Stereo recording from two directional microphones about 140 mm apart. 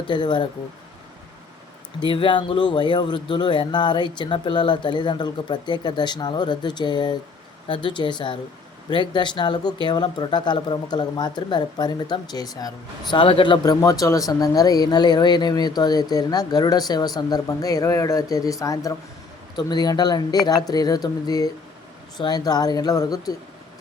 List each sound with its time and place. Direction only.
0.1 s speech: 35° left (ahead or behind)
2.0 s speech: 35° left (ahead or behind)